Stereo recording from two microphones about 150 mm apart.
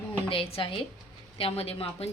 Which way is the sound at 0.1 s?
35° left (ahead or behind).